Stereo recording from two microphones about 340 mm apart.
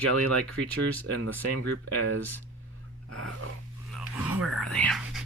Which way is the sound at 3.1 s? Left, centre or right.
Right.